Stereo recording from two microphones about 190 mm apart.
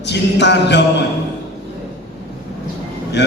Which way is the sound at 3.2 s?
65° left (ahead or behind).